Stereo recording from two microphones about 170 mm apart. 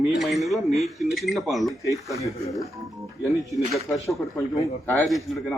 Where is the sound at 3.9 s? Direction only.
Centre (ahead or behind).